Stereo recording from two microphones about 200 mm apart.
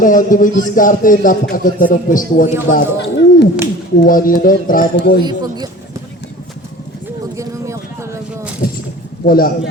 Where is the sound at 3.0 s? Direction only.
60° left (ahead or behind).